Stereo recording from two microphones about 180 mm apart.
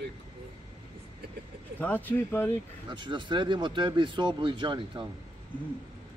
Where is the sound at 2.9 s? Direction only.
25° right (ahead or behind).